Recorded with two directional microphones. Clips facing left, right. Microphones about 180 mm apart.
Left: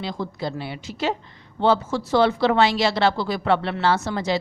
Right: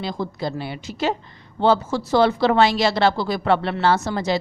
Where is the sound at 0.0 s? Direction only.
40° right (ahead or behind).